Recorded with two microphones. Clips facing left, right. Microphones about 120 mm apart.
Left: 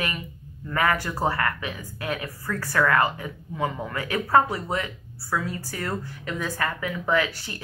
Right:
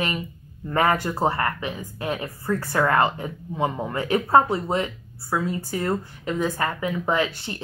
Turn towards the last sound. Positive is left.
turn(degrees=-25)  # may be behind; listen again after turning